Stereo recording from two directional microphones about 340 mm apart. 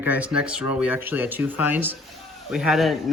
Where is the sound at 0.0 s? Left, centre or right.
Centre.